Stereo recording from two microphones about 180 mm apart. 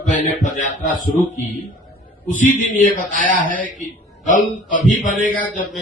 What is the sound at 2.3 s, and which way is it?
A man's voice, 45° left (ahead or behind).